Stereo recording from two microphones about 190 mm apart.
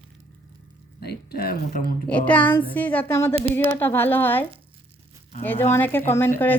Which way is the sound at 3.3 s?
30° right (ahead or behind).